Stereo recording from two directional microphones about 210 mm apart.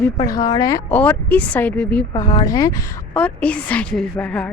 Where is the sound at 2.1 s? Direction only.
25° left (ahead or behind).